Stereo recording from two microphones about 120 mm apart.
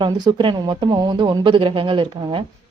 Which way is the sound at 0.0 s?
40° right (ahead or behind).